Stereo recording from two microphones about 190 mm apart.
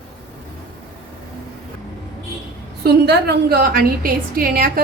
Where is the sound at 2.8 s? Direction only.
60° right (ahead or behind).